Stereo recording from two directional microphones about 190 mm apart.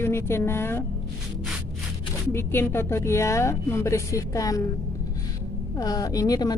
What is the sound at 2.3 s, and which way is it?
Speech, 15° left (ahead or behind).